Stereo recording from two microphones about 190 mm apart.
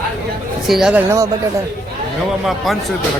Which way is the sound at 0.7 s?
5° right (ahead or behind).